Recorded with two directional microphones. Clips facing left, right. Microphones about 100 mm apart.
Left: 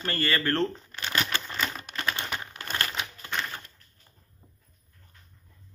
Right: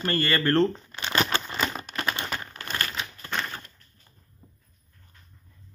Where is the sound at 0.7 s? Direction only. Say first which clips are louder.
Right 3 dB; 20° right (ahead or behind).